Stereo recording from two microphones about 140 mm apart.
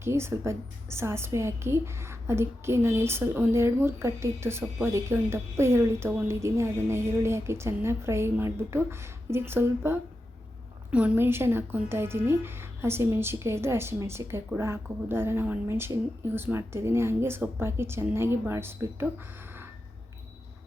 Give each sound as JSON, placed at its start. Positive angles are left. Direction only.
{"t": 0.0, "sound": "a woman's voice", "side_deg": -20}